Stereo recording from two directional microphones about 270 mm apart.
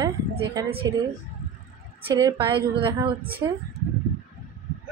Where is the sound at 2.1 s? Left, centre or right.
Centre.